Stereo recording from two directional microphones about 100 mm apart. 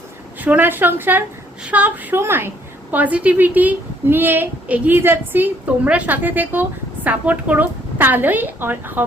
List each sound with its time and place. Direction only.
0.3 s a woman's voice: 15° right (ahead or behind)